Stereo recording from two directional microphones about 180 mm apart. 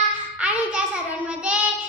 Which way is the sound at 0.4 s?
5° right (ahead or behind).